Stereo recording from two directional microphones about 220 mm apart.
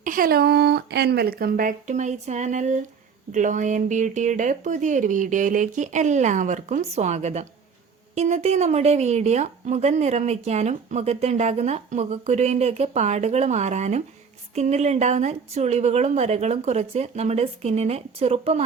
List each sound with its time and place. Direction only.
0.0 s speech: 40° right (ahead or behind)